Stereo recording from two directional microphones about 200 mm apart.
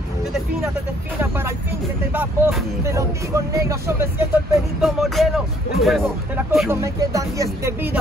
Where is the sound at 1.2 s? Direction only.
10° right (ahead or behind).